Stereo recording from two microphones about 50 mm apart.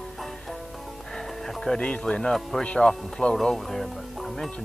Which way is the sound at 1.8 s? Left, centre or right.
Left.